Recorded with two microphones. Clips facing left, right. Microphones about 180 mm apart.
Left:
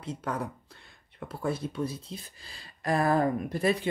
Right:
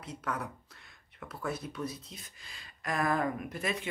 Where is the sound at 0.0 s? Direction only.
30° left (ahead or behind).